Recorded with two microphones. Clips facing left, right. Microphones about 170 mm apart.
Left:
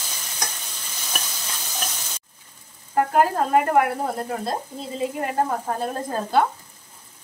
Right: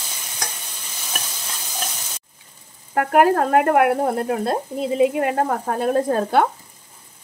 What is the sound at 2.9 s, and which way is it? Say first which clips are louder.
Speech: right 3 dB; 65° right (ahead or behind).